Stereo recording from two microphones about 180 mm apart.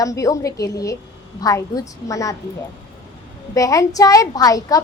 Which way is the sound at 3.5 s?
20° left (ahead or behind).